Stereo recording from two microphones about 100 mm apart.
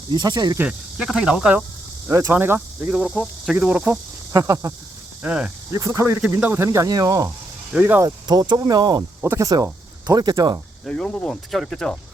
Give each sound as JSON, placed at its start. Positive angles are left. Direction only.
{"t": 0.1, "sound": "speech", "side_deg": -45}
{"t": 0.6, "sound": "cricket", "side_deg": -10}
{"t": 2.0, "sound": "speech", "side_deg": -30}
{"t": 2.3, "sound": "cricket", "side_deg": -15}
{"t": 2.9, "sound": "cricket", "side_deg": -5}
{"t": 4.3, "sound": "speech", "side_deg": -30}
{"t": 5.2, "sound": "cricket", "side_deg": -10}
{"t": 5.7, "sound": "speech", "side_deg": -30}
{"t": 6.7, "sound": "speech", "side_deg": -35}
{"t": 7.7, "sound": "cricket", "side_deg": -15}
{"t": 8.0, "sound": "speech", "side_deg": -45}
{"t": 9.2, "sound": "speech", "side_deg": -20}
{"t": 10.1, "sound": "speech", "side_deg": -35}
{"t": 10.8, "sound": "speech", "side_deg": 10}